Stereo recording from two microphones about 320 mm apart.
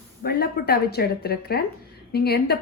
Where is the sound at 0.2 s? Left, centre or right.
Left.